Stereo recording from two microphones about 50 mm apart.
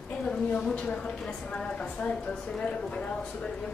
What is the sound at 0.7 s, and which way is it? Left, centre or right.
Speech, left.